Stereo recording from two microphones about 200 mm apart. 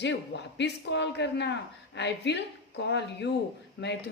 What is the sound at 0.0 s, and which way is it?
A woman's voice, 60° left (ahead or behind).